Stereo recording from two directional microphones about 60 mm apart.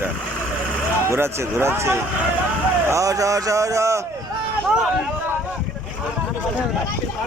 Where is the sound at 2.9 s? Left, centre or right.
Right.